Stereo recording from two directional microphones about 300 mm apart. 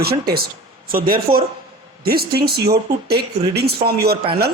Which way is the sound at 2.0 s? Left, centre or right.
Right.